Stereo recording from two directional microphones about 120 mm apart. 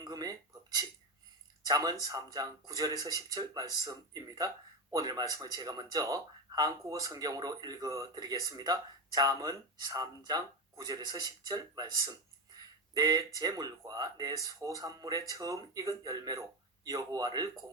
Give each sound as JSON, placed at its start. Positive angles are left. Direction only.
{"t": 0.0, "sound": "dishes", "side_deg": -30}
{"t": 1.6, "sound": "speech", "side_deg": -35}